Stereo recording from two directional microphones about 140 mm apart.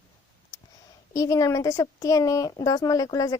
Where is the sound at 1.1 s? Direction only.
25° left (ahead or behind).